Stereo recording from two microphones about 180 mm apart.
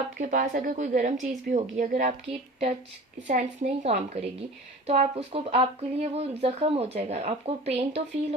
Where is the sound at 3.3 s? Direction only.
40° right (ahead or behind).